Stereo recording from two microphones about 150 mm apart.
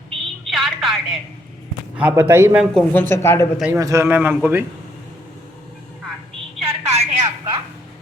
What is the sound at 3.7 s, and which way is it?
Speech, 20° right (ahead or behind).